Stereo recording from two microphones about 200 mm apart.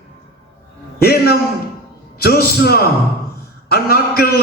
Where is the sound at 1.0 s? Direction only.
50° left (ahead or behind).